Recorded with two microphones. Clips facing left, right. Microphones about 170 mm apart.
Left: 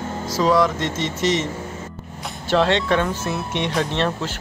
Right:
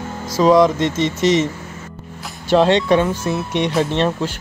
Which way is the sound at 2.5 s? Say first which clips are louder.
Right 5 dB; 15° right (ahead or behind).